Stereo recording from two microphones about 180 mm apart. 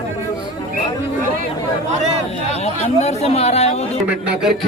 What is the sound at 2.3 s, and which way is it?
Speech, 35° left (ahead or behind).